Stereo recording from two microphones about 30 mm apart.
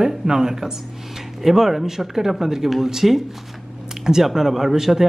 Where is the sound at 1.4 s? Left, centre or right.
Centre.